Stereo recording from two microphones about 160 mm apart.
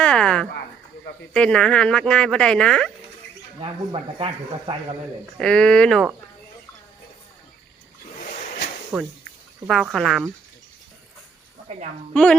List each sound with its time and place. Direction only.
0.0 s a sound: 5° left (ahead or behind)
1.3 s speech: 5° left (ahead or behind)
3.6 s speech: 30° right (ahead or behind)
5.4 s speech: 5° left (ahead or behind)
8.9 s speech: 5° right (ahead or behind)
12.1 s speech: 5° left (ahead or behind)